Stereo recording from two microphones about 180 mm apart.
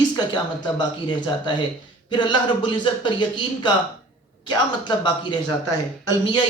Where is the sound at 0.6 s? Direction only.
25° left (ahead or behind).